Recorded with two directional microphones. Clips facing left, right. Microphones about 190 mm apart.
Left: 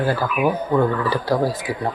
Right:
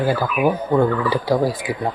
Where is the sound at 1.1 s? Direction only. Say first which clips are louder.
Right 2 dB; 15° right (ahead or behind).